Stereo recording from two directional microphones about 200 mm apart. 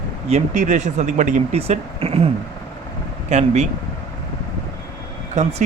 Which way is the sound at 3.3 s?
35° right (ahead or behind).